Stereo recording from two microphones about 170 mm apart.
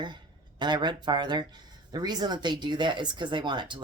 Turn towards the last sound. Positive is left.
turn(degrees=-30)  # may be behind; listen again after turning